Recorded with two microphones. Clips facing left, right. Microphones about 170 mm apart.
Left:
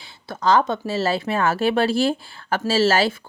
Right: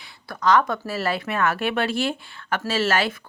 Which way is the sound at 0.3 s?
25° left (ahead or behind).